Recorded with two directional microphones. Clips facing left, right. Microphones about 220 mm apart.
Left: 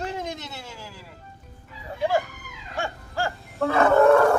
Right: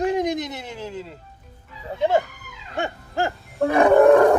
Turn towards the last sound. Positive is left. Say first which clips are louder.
# right 4 dB
turn(degrees=-15)  # may be behind; listen again after turning